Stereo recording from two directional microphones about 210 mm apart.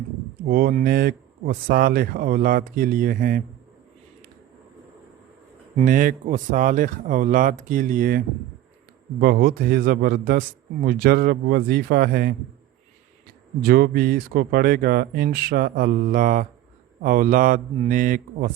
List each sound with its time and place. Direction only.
0.4 s speech: 40° right (ahead or behind)
5.7 s speech: 40° right (ahead or behind)
9.2 s speech: 45° right (ahead or behind)
13.6 s speech: 45° right (ahead or behind)